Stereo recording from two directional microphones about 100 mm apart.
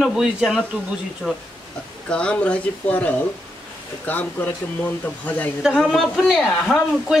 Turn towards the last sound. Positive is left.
turn(degrees=0)  # may be behind; listen again after turning